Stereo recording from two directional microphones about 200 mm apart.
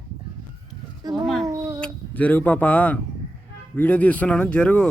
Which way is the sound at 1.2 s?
Centre (ahead or behind).